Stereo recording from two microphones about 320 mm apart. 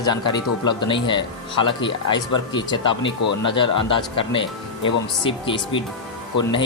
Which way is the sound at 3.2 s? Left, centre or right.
Left.